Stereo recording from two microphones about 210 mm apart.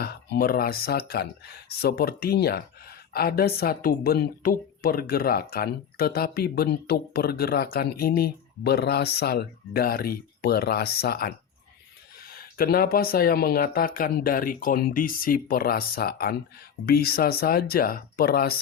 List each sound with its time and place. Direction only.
0.0 s speech: 50° left (ahead or behind)